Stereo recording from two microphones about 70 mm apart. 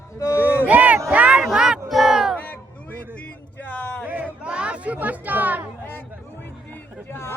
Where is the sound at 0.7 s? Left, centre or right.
Right.